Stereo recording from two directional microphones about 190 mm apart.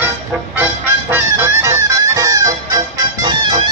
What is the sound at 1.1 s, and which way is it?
Music, 15° right (ahead or behind).